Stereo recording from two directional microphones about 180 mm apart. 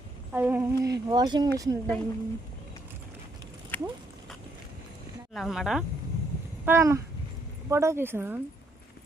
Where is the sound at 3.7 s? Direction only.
10° left (ahead or behind).